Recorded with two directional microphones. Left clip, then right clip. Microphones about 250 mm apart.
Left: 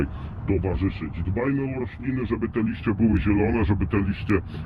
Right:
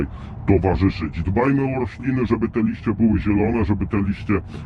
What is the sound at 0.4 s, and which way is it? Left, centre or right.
Speech, right.